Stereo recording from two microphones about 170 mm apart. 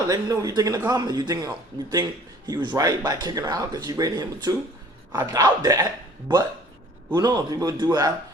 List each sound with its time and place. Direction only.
0.1 s speech: 20° right (ahead or behind)
7.1 s speech: 25° right (ahead or behind)